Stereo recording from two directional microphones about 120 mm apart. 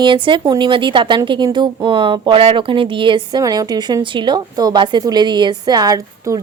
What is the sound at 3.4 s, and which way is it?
A woman's voice, 30° right (ahead or behind).